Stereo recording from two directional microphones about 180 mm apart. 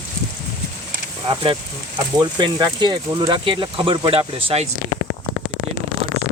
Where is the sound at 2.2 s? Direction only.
25° right (ahead or behind).